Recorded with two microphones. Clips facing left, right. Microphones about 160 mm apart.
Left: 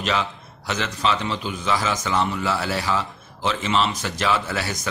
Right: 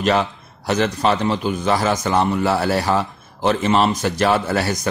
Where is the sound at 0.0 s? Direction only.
50° right (ahead or behind).